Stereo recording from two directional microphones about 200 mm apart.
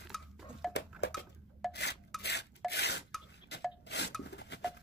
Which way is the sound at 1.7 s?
55° left (ahead or behind).